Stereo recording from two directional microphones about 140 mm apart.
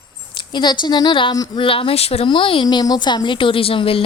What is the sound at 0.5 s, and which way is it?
A woman's voice, 30° left (ahead or behind).